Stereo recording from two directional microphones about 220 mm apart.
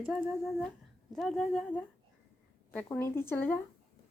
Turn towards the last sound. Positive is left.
turn(degrees=10)  # may be behind; listen again after turning